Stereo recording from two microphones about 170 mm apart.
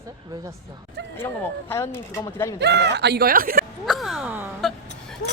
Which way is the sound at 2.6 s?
80° right.